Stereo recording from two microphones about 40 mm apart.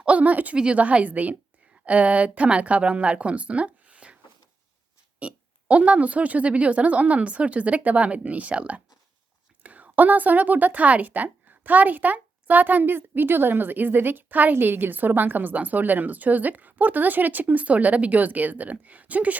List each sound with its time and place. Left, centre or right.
0.0 s a sound: right
0.5 s a woman's voice: right
0.8 s a woman's voice: right
5.2 s a woman's voice: right
14.5 s speech: right